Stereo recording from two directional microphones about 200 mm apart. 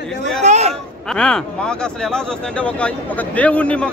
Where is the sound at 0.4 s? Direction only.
35° right (ahead or behind).